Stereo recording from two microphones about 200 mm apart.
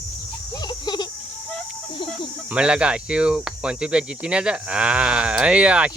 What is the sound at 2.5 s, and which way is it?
Speech, 5° right (ahead or behind).